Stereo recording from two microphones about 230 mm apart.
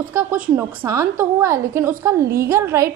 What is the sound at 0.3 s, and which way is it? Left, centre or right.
Speech, right.